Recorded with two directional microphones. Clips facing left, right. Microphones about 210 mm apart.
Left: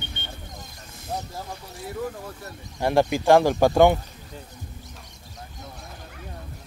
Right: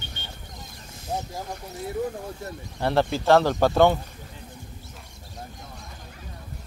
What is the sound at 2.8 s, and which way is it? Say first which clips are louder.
Speech: left 2 dB; 15° left (ahead or behind).